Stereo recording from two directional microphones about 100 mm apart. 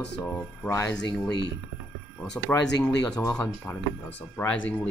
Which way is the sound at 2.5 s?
25° left (ahead or behind).